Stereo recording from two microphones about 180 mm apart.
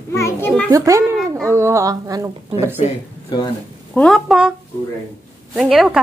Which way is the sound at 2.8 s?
30° left (ahead or behind).